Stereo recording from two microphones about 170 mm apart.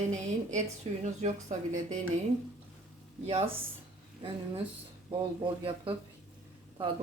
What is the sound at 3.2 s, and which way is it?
Speech, 35° right (ahead or behind).